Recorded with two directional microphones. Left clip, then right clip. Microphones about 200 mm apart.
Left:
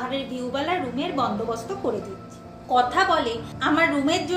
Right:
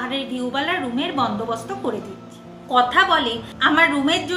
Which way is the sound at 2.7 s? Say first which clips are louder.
Right 4 dB; 5° right (ahead or behind).